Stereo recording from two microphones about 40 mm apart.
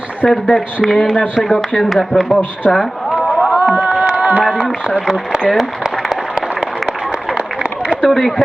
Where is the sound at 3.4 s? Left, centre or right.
Right.